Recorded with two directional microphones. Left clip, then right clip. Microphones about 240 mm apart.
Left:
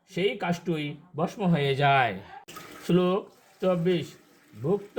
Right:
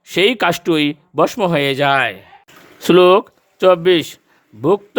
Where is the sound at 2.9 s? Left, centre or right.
Right.